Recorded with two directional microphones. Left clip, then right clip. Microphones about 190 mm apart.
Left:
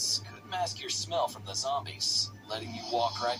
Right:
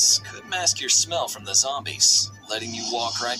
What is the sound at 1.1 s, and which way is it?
Speech, 30° right (ahead or behind).